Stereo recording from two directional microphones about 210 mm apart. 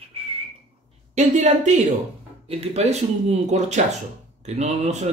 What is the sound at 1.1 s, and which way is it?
Speech, 35° right (ahead or behind).